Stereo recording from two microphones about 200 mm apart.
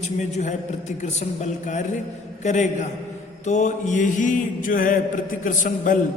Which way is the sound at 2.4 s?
35° left (ahead or behind).